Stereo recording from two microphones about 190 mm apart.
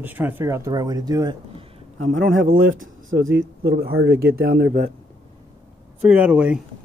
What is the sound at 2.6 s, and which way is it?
Speech, 90° right.